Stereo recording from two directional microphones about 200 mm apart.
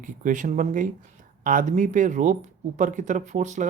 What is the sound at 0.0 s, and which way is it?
Speech, 40° right (ahead or behind).